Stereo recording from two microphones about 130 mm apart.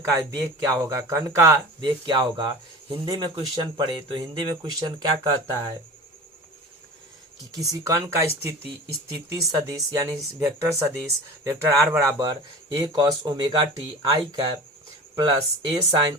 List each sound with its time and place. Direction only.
0.2 s speech: 25° right (ahead or behind)
2.0 s speech: 35° right (ahead or behind)
7.5 s speech: 25° right (ahead or behind)
9.5 s speech: 25° right (ahead or behind)